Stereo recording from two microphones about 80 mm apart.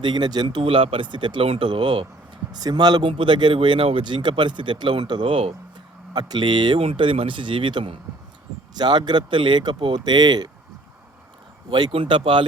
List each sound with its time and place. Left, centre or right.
0.0 s speech: right
2.5 s speech: right
6.1 s speech: right
8.7 s speech: right
11.7 s speech: right